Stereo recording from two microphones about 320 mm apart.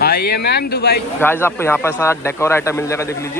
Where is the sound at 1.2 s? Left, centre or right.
Centre.